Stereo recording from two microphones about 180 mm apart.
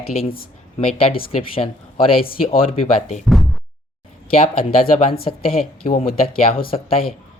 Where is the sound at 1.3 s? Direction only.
30° left (ahead or behind).